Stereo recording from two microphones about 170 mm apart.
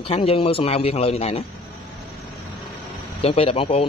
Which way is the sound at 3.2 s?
35° left (ahead or behind).